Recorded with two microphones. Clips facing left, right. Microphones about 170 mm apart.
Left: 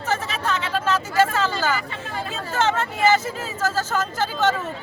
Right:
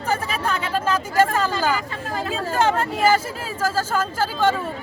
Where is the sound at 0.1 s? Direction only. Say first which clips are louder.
Right 1 dB; 10° right (ahead or behind).